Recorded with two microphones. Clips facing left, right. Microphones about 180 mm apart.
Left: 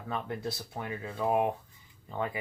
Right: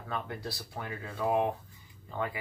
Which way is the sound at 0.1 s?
20° left (ahead or behind).